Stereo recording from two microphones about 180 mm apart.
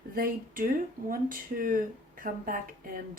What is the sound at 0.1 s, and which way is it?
Speech, 55° right (ahead or behind).